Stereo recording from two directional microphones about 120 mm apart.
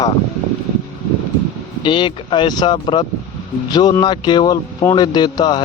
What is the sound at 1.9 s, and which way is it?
Speech, 40° left (ahead or behind).